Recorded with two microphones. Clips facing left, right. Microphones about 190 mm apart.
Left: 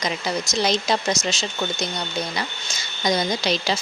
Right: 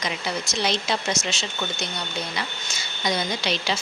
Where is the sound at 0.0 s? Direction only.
40° left (ahead or behind).